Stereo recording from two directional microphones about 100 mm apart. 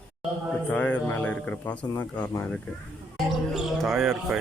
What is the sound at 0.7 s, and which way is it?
Speech, 15° left (ahead or behind).